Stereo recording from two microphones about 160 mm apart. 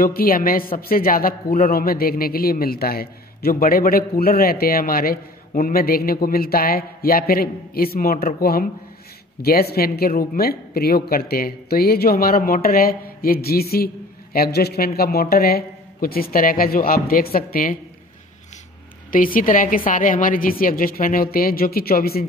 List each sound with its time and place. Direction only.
0.0 s a woman's voice: 65° left (ahead or behind)
19.1 s a woman's voice: 60° left (ahead or behind)